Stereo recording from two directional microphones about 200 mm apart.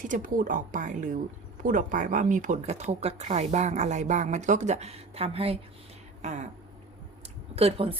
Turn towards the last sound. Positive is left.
turn(degrees=-30)  # may be behind; listen again after turning